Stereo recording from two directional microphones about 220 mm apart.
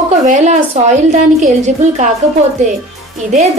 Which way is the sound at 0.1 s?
30° right (ahead or behind).